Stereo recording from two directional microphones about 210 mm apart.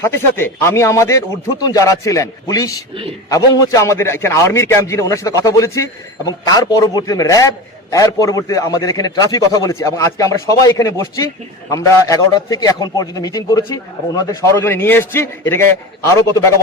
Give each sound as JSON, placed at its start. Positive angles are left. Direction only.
{"t": 0.0, "sound": "a man's voice", "side_deg": 10}